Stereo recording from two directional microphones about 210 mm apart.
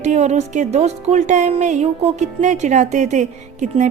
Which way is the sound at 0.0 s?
35° right (ahead or behind).